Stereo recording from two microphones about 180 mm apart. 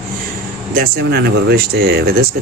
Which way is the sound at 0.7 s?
60° right (ahead or behind).